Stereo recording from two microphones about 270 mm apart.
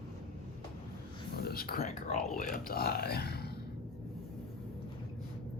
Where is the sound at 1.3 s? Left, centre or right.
Left.